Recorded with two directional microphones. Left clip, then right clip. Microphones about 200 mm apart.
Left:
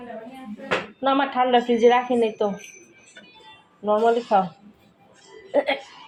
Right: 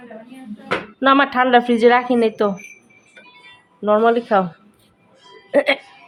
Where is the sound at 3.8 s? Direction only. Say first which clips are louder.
Right 5 dB; 30° right (ahead or behind).